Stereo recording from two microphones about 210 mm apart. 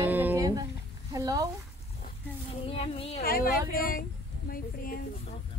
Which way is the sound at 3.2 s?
45° left (ahead or behind).